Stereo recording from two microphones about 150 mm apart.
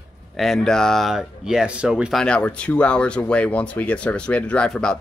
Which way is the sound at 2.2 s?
10° left (ahead or behind).